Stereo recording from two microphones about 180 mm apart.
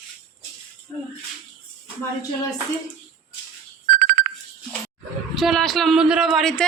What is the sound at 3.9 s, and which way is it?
Ringtone, 50° right (ahead or behind).